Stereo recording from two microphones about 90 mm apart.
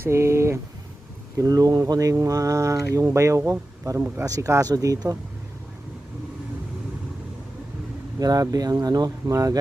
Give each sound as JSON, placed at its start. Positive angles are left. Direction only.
{"t": 0.0, "sound": "speech", "side_deg": -30}
{"t": 1.4, "sound": "speech", "side_deg": -45}
{"t": 8.2, "sound": "speech", "side_deg": -45}